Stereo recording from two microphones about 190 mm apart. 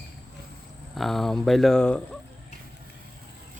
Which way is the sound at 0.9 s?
Centre (ahead or behind).